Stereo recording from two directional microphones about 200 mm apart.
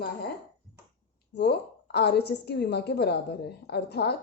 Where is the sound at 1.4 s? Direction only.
55° left (ahead or behind).